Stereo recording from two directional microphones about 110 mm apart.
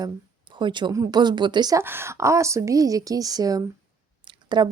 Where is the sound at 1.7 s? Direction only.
20° right (ahead or behind).